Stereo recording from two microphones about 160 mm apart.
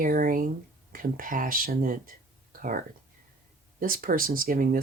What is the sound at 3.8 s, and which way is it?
Speech, 65° right (ahead or behind).